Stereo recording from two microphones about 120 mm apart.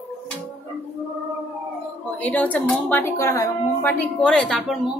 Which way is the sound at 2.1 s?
15° left (ahead or behind).